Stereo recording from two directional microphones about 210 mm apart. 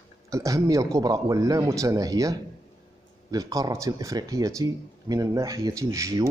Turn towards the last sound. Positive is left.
turn(degrees=-15)  # may be behind; listen again after turning